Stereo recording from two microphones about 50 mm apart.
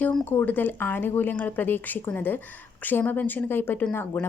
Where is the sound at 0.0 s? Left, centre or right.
Left.